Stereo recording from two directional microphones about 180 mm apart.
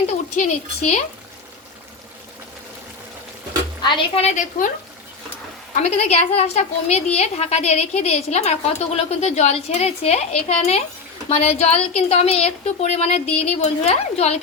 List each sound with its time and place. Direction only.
0.3 s a woman's voice: 40° left (ahead or behind)
3.8 s a woman's voice: 30° left (ahead or behind); by 4.7 s 45° left (ahead or behind)
5.7 s a woman's voice: 40° left (ahead or behind)